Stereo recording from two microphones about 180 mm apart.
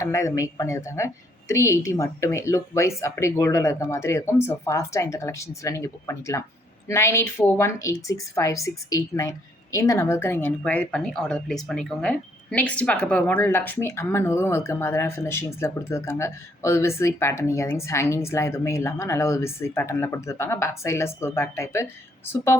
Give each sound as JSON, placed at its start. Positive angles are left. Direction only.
{"t": 0.0, "sound": "a woman's voice", "side_deg": 15}